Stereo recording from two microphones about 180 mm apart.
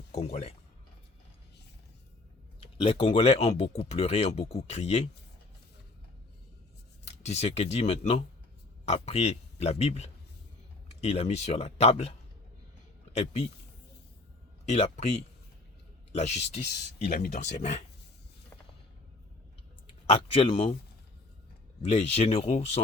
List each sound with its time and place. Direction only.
0.1 s speech: 40° left (ahead or behind)
3.0 s speech: 35° left (ahead or behind)
7.0 s speech: 35° left (ahead or behind)
13.1 s speech: 35° left (ahead or behind)
14.7 s speech: 35° left (ahead or behind)
17.1 s speech: 55° left (ahead or behind)
17.4 s speech: 40° left (ahead or behind)
20.3 s speech: 30° left (ahead or behind)
21.8 s speech: 35° left (ahead or behind)